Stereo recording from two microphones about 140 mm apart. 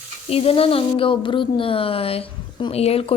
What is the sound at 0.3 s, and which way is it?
A woman's voice, 45° left (ahead or behind).